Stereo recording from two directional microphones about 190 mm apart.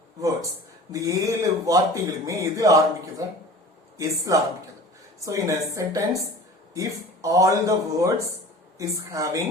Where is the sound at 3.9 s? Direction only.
15° right (ahead or behind).